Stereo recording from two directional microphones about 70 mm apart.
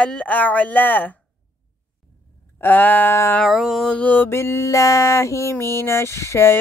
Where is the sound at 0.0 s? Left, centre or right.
Centre.